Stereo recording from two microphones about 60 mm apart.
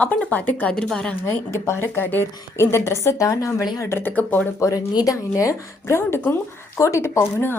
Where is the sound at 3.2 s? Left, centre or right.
Left.